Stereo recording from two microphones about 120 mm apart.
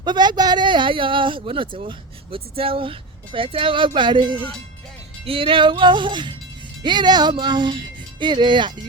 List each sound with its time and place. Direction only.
0.0 s speech: 40° right (ahead or behind)